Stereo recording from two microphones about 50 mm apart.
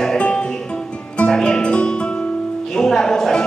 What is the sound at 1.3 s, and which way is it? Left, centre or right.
Speech, centre.